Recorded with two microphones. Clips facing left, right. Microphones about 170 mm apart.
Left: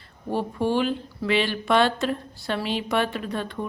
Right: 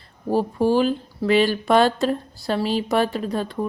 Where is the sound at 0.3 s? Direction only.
40° right (ahead or behind).